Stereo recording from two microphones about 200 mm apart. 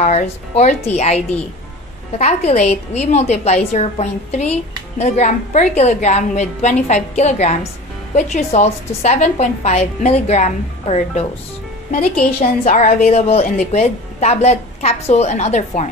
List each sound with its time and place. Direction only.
0.0 s a woman's voice: 35° left (ahead or behind)
11.9 s a woman's voice: 45° left (ahead or behind)